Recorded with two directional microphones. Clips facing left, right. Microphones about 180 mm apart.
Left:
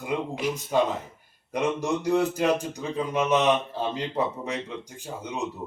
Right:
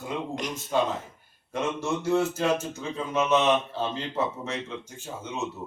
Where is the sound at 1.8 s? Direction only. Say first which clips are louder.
Right 1 dB; 15° left (ahead or behind).